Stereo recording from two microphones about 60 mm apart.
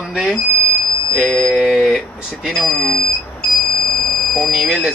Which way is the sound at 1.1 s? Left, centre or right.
Right.